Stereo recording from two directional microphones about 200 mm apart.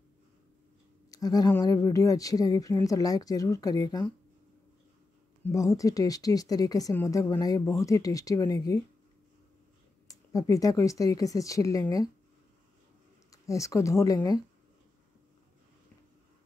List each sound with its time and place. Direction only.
1.1 s speech: 20° left (ahead or behind)
5.4 s speech: 15° left (ahead or behind)
10.0 s speech: 15° left (ahead or behind)
13.3 s speech: 15° left (ahead or behind)